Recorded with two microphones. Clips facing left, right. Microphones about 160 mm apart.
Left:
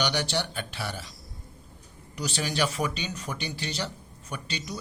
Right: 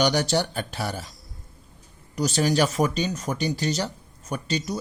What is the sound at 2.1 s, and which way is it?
Speech, 40° right (ahead or behind).